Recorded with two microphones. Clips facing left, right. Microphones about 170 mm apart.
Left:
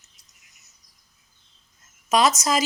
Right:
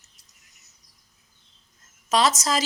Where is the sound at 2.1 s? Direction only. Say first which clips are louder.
Left 2 dB; 15° left (ahead or behind).